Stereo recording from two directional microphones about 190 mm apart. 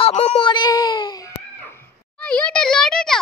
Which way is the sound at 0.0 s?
35° left (ahead or behind).